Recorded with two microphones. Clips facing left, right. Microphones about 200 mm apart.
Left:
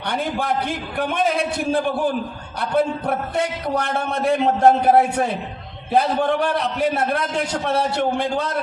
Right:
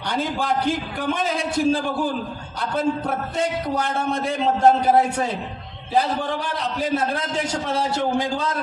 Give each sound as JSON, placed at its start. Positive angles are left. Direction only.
{"t": 0.1, "sound": "a man's voice", "side_deg": 60}